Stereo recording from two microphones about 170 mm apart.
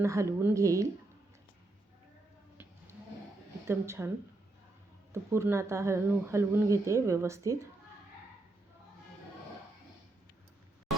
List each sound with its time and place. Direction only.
0.0 s speech: 15° right (ahead or behind)
3.7 s speech: 15° right (ahead or behind)
5.1 s speech: 15° right (ahead or behind)